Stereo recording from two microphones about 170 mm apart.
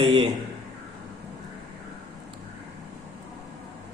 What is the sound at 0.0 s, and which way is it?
Speech, 30° right (ahead or behind).